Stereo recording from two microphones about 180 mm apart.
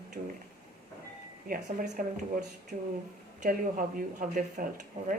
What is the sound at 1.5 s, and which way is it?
A woman's voice, 50° right (ahead or behind).